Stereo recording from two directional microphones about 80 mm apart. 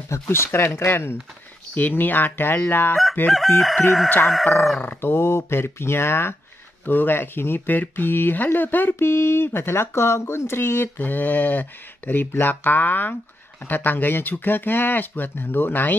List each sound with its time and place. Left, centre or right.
0.1 s speech: left
3.3 s crowing: centre
4.7 s speech: left